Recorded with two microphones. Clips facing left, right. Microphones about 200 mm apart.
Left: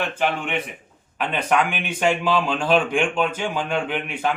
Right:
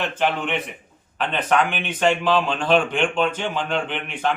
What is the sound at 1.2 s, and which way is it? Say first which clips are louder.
Speech: right 1 dB; 10° left (ahead or behind).